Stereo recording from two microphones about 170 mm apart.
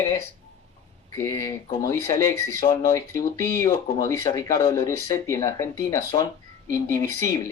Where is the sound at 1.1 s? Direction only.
20° left (ahead or behind).